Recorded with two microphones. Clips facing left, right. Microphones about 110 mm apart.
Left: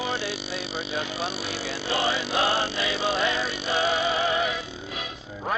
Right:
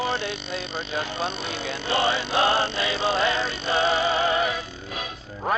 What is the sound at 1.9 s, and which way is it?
Music, 65° right (ahead or behind).